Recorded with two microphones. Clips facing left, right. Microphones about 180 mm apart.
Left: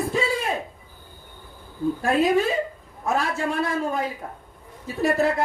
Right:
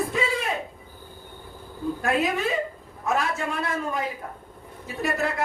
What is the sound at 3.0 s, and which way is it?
Speech, 30° left (ahead or behind).